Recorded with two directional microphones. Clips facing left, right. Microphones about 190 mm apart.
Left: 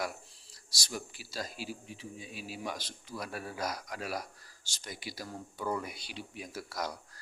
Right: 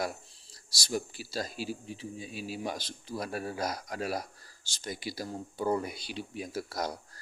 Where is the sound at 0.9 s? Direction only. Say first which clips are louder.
Right 7 dB; 35° right (ahead or behind).